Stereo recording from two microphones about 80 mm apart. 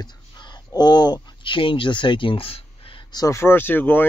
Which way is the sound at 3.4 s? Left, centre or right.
Left.